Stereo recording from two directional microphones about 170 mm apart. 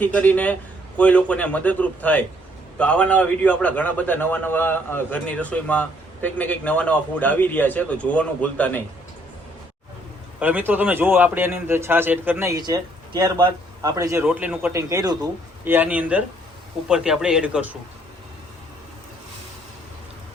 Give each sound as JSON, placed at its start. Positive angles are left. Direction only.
{"t": 0.0, "sound": "a man's voice", "side_deg": 10}
{"t": 10.4, "sound": "a man's voice", "side_deg": -10}
{"t": 14.3, "sound": "a man's voice", "side_deg": -5}
{"t": 15.6, "sound": "a man's voice", "side_deg": -10}